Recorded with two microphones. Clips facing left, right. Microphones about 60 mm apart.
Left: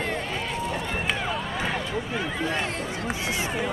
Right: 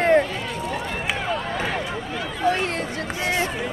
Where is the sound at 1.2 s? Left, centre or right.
Centre.